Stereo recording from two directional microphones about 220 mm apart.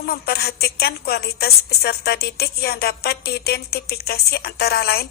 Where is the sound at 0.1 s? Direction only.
45° left (ahead or behind).